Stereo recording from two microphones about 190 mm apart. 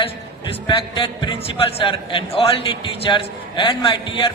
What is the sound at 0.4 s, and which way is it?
A man's voice, 25° left (ahead or behind).